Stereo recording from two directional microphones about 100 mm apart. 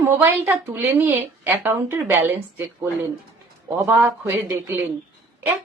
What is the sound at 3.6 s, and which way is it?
A woman's voice, 20° right (ahead or behind).